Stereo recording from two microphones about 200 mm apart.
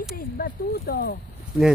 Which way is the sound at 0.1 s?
50° left (ahead or behind).